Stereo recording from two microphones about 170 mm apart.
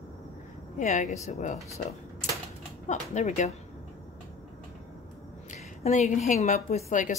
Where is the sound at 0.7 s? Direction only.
45° left (ahead or behind).